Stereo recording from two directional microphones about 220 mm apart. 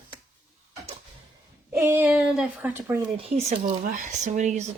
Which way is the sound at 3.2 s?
30° right (ahead or behind).